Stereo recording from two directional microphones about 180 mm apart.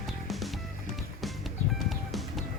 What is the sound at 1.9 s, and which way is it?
Music, centre (ahead or behind).